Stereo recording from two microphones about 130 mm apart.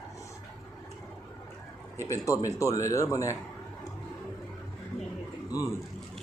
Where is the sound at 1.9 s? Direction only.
25° left (ahead or behind).